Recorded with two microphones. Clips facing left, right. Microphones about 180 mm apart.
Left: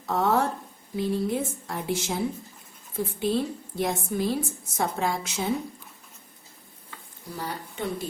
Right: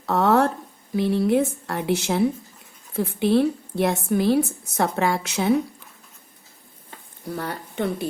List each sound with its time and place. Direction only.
0.0 s a woman's voice: 70° right (ahead or behind)
7.3 s speech: 65° right (ahead or behind)